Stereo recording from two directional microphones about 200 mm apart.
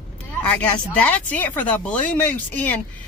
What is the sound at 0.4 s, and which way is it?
Speech, 5° left (ahead or behind).